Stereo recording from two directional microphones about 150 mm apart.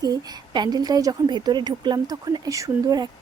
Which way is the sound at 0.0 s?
25° right (ahead or behind).